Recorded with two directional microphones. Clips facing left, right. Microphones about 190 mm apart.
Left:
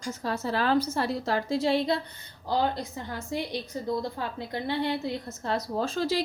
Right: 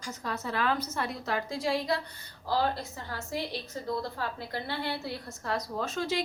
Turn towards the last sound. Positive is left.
turn(degrees=35)  # may be behind; listen again after turning